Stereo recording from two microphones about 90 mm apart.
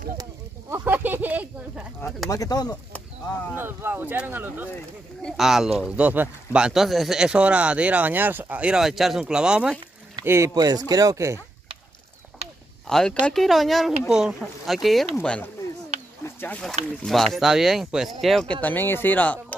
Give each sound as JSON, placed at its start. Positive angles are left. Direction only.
{"t": 0.7, "sound": "a sound", "side_deg": -20}
{"t": 2.2, "sound": "speech", "side_deg": 40}
{"t": 3.5, "sound": "speech", "side_deg": -25}
{"t": 5.4, "sound": "speech", "side_deg": -5}
{"t": 10.2, "sound": "speech", "side_deg": -30}
{"t": 10.5, "sound": "speech", "side_deg": -45}
{"t": 12.8, "sound": "speech", "side_deg": 5}
{"t": 16.5, "sound": "speech", "side_deg": 5}
{"t": 18.6, "sound": "speech", "side_deg": 20}